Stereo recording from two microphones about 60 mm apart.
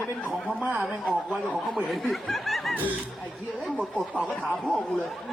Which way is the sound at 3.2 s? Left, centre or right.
Centre.